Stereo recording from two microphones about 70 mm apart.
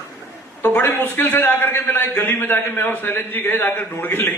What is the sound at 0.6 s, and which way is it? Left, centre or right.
A man's voice, left.